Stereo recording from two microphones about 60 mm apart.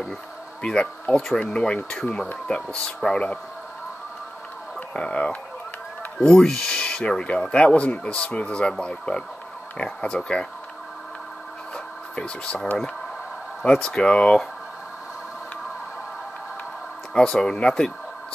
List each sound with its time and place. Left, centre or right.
0.6 s speech: centre
4.7 s speech: centre
11.7 s a sound: centre
13.7 s speech: centre
17.1 s speech: centre